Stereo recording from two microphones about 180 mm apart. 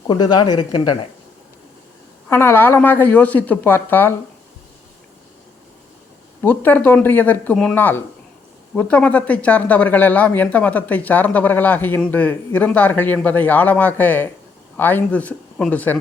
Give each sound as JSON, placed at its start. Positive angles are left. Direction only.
{"t": 0.1, "sound": "speech", "side_deg": 25}
{"t": 2.3, "sound": "speech", "side_deg": 15}
{"t": 6.4, "sound": "speech", "side_deg": 10}